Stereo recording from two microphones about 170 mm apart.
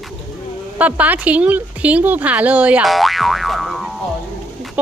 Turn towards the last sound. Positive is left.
turn(degrees=0)  # may be behind; listen again after turning